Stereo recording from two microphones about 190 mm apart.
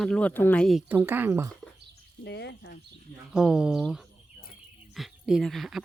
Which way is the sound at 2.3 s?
65° left (ahead or behind).